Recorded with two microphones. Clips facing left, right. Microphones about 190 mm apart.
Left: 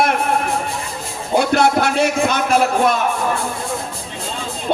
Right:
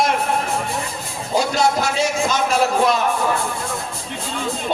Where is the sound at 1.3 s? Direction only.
60° left (ahead or behind).